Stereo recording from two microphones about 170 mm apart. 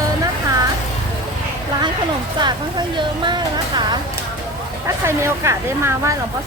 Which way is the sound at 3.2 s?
25° right (ahead or behind).